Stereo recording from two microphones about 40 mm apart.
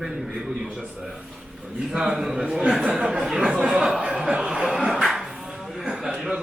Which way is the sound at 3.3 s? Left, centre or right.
Centre.